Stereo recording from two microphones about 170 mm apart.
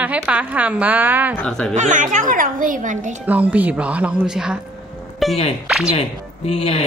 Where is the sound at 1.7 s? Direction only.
45° right (ahead or behind).